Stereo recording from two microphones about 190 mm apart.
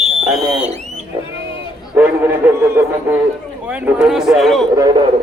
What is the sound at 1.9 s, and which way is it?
Speech, 10° right (ahead or behind).